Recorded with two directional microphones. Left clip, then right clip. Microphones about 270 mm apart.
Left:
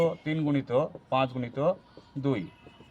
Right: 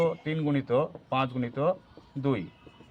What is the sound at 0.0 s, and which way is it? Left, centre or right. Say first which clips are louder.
Speech: even; centre.